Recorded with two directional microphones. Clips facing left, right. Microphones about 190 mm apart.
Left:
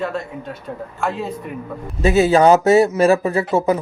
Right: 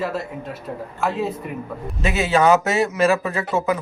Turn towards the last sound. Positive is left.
turn(degrees=35)  # may be behind; listen again after turning